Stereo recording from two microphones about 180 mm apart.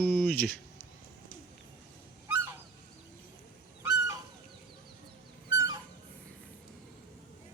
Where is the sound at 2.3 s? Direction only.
15° right (ahead or behind).